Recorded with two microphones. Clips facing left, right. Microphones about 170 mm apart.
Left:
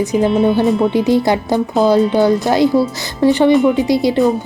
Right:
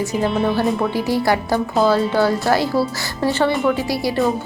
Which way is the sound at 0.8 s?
20° left (ahead or behind).